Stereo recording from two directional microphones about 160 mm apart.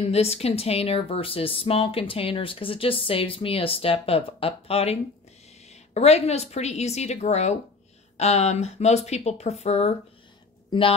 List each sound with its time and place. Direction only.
0.0 s a woman's voice: 40° left (ahead or behind)